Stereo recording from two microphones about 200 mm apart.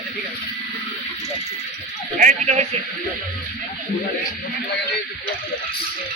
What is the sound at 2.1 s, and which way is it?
Speech, 40° right (ahead or behind).